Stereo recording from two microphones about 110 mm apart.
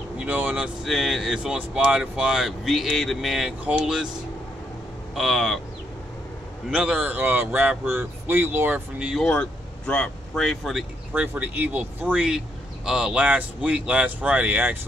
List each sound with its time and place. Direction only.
0.2 s vehicle: 15° right (ahead or behind)
0.8 s speech: centre (ahead or behind)
5.1 s speech: centre (ahead or behind)
6.7 s speech: 10° right (ahead or behind)
9.3 s speech: 10° left (ahead or behind)
11.1 s speech: 15° right (ahead or behind)